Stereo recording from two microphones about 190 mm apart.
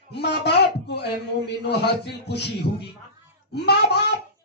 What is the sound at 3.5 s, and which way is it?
Music, 60° left (ahead or behind).